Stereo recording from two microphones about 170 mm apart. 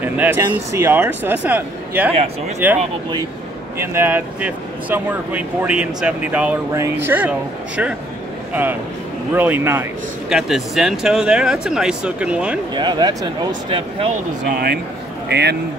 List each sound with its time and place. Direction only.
0.0 s speech: 10° right (ahead or behind)
9.3 s speech: 10° right (ahead or behind)
10.3 s speech: centre (ahead or behind)
12.7 s speech: 25° right (ahead or behind)
15.2 s speech: 80° right